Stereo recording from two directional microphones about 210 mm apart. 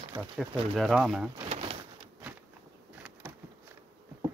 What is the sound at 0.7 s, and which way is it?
Speech, centre (ahead or behind).